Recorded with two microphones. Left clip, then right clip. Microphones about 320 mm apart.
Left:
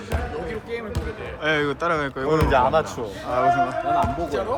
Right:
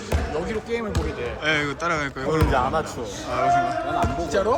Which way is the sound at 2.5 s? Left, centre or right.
Left.